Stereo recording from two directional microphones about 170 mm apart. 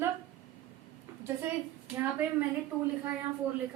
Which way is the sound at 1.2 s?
10° right (ahead or behind).